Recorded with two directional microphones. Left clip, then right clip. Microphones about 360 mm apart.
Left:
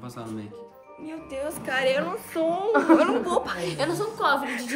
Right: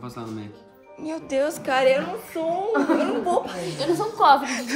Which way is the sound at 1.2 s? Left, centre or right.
Right.